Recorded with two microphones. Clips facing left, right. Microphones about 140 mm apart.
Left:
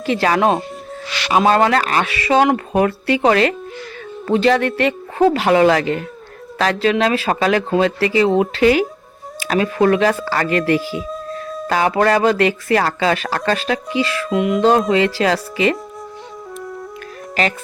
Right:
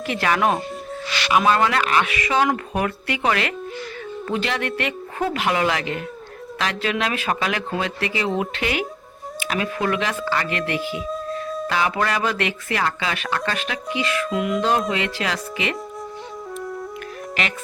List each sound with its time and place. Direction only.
0.0 s speech: 30° left (ahead or behind)
11.1 s music: centre (ahead or behind)
11.7 s speech: 40° left (ahead or behind)
14.3 s speech: 25° left (ahead or behind)
14.8 s speech: 35° left (ahead or behind)
16.6 s music: centre (ahead or behind)